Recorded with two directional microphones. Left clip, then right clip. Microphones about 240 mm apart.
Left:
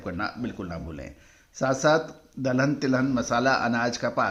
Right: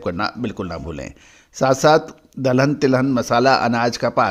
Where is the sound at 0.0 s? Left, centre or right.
Right.